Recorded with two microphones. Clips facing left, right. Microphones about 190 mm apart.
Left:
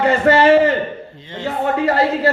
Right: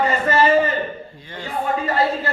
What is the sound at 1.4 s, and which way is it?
Speech, 25° left (ahead or behind).